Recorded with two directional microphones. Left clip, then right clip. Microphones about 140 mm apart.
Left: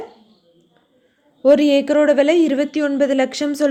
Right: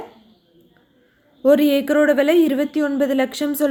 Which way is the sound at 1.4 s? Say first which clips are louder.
Left 2 dB; 15° left (ahead or behind).